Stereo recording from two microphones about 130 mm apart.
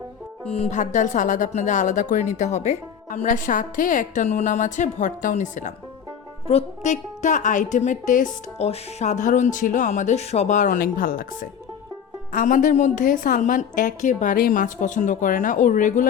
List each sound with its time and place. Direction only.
0.4 s speech: 50° left (ahead or behind)
0.7 s a woman's voice: 70° left (ahead or behind)
6.5 s a woman's voice: 60° left (ahead or behind); by 8.3 s 80° left
8.5 s a woman's voice: 55° left (ahead or behind); by 16.0 s 80° left